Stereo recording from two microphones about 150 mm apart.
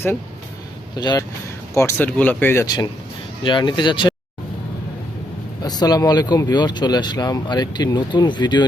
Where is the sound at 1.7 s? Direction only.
15° left (ahead or behind).